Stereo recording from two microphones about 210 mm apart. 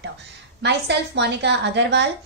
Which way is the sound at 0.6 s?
55° right (ahead or behind).